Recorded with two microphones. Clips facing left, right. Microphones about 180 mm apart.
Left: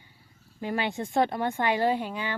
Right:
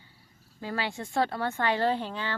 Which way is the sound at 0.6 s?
20° left (ahead or behind).